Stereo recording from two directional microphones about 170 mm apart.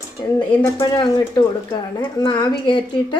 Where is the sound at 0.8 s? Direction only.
25° left (ahead or behind).